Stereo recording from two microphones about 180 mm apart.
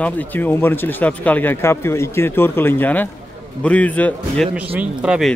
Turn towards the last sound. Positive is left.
turn(degrees=-5)  # may be behind; listen again after turning